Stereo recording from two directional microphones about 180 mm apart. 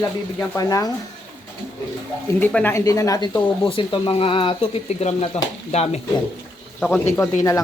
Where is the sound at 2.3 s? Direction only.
5° left (ahead or behind).